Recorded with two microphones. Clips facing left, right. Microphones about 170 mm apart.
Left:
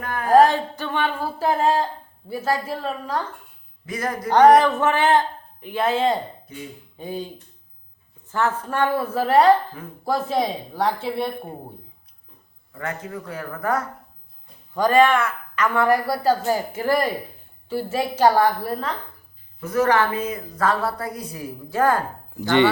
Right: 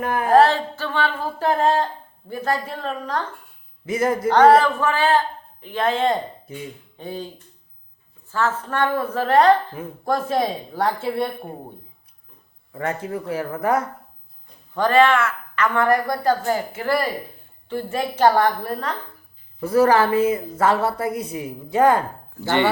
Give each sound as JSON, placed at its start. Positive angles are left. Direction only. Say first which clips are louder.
{"t": 0.0, "sound": "a woman's voice", "louder": "right 5 dB", "side_deg": -25}
{"t": 0.3, "sound": "a woman's voice", "louder": "left 1 dB", "side_deg": 15}
{"t": 3.8, "sound": "a woman's voice", "louder": "right 6 dB", "side_deg": -25}
{"t": 4.3, "sound": "a woman's voice", "louder": "left 1 dB", "side_deg": 15}
{"t": 8.3, "sound": "a woman's voice", "louder": "even", "side_deg": 15}
{"t": 12.7, "sound": "a woman's voice", "louder": "right 5 dB", "side_deg": -25}
{"t": 14.8, "sound": "a woman's voice", "louder": "even", "side_deg": 10}
{"t": 19.5, "sound": "a woman's voice", "louder": "right 3 dB", "side_deg": -30}
{"t": 22.4, "sound": "a woman's voice", "louder": "left 2 dB", "side_deg": 15}